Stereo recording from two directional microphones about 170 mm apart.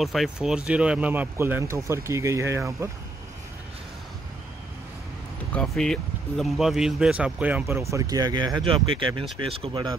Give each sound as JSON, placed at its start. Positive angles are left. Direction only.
{"t": 0.0, "sound": "speech", "side_deg": 0}
{"t": 5.5, "sound": "speech", "side_deg": 5}